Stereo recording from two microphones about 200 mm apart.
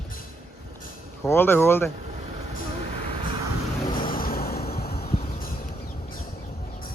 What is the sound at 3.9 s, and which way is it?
Vehicle, 45° left (ahead or behind).